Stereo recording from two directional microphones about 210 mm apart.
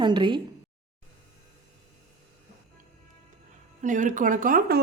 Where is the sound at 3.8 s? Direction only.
35° right (ahead or behind).